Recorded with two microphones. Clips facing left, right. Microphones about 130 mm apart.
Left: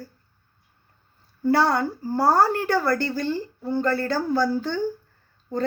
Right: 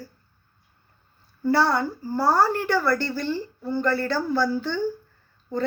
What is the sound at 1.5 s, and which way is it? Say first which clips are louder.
A woman's voice: even; 50° left (ahead or behind).